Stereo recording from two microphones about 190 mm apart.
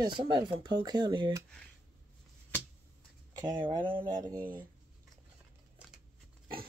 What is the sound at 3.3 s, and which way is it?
Speech, 25° right (ahead or behind).